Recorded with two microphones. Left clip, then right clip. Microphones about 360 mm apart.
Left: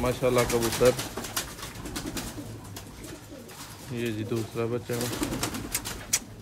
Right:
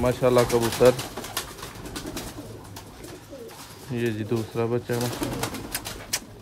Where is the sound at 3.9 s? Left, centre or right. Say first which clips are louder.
Right 4 dB; right.